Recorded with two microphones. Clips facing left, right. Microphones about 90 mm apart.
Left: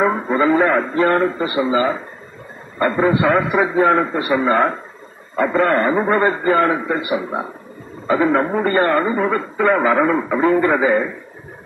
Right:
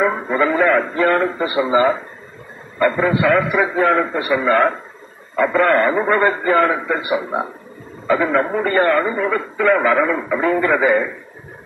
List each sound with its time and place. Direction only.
0.0 s speech: 30° left (ahead or behind)
1.4 s speech: 20° right (ahead or behind)
2.8 s speech: 30° left (ahead or behind)
8.1 s speech: 25° left (ahead or behind)